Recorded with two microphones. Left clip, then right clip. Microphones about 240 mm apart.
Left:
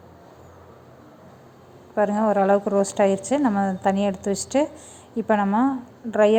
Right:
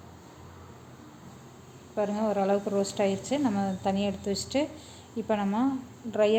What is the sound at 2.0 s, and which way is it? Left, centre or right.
A woman's voice, centre.